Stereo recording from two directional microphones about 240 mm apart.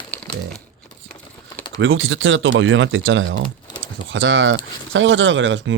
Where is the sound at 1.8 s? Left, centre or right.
Right.